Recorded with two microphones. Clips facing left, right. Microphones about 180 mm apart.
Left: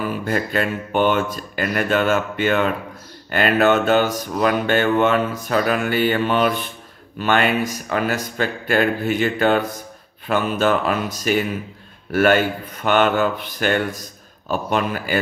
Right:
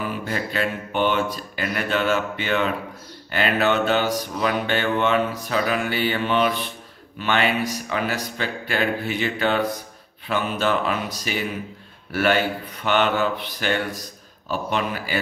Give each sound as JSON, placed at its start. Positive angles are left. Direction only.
{"t": 0.2, "sound": "speech", "side_deg": 50}